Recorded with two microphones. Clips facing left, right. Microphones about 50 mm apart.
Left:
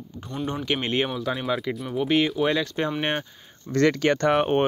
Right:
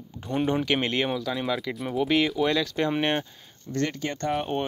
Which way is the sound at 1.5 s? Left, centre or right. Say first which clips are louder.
Left 1 dB; centre.